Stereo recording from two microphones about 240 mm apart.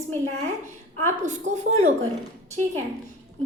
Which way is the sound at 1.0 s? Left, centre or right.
Right.